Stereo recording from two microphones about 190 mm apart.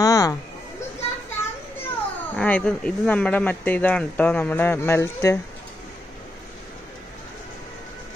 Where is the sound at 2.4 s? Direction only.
5° left (ahead or behind).